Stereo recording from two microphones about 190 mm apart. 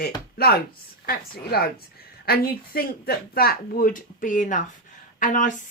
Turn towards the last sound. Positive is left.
turn(degrees=45)  # may be behind; listen again after turning